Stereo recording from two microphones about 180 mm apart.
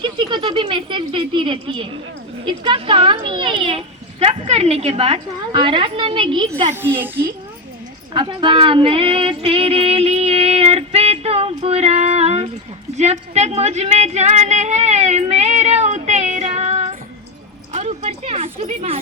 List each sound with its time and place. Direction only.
0.0 s a sound: 25° right (ahead or behind)
2.4 s a child's voice: 25° right (ahead or behind)
6.8 s a child's voice: 10° right (ahead or behind)
8.1 s speech: 25° right (ahead or behind)
13.0 s female singing: 40° right (ahead or behind)
17.7 s a woman's voice: 35° right (ahead or behind)